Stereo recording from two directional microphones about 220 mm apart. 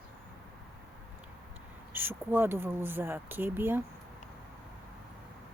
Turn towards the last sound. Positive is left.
turn(degrees=-10)  # may be behind; listen again after turning